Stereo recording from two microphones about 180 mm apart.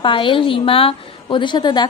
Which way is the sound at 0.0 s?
30° left (ahead or behind).